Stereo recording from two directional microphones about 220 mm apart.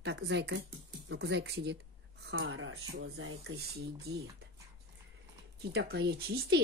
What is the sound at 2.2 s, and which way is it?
Speech, 60° right (ahead or behind).